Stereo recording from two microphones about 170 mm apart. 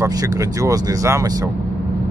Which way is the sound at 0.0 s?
20° right (ahead or behind).